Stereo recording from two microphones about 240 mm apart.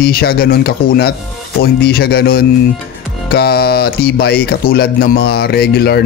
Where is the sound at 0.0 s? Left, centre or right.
Left.